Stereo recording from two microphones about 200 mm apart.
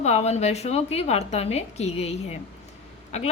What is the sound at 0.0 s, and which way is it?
A woman's voice, 35° left (ahead or behind).